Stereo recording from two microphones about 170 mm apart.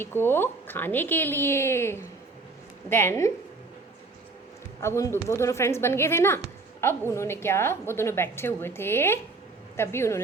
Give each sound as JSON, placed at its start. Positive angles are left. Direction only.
{"t": 0.0, "sound": "a woman's voice", "side_deg": 15}
{"t": 4.8, "sound": "a woman's voice", "side_deg": 15}